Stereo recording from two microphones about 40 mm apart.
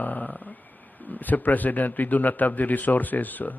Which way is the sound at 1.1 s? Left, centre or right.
Left.